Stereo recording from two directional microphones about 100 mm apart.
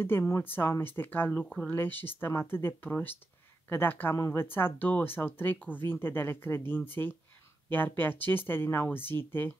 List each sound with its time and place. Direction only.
0.0 s speech: 25° left (ahead or behind)